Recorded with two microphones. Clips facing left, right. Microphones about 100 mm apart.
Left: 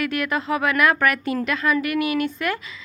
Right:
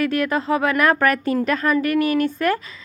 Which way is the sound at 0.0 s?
35° right (ahead or behind).